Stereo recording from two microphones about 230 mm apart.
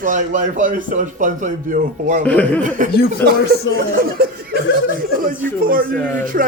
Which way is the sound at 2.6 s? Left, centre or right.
Right.